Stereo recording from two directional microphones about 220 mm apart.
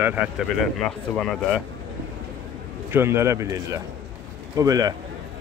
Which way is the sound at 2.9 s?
10° right (ahead or behind).